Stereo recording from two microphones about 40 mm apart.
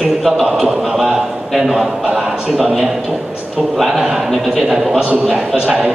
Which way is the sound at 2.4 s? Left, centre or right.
Right.